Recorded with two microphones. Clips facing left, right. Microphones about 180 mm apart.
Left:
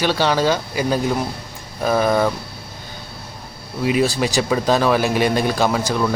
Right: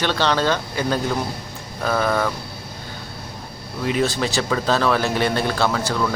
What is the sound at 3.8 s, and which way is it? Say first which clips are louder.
Speech: left 3 dB; 10° left (ahead or behind).